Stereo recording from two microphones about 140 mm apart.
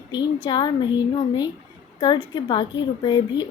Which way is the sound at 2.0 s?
30° left (ahead or behind).